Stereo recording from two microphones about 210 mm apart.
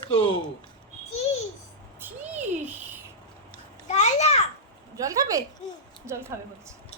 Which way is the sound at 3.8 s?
30° left (ahead or behind).